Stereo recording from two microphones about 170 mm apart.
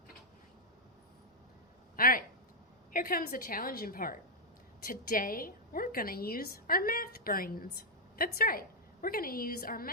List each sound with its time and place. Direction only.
2.0 s a woman's voice: 55° left (ahead or behind)